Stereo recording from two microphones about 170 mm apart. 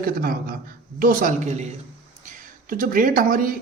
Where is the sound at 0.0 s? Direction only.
55° right (ahead or behind).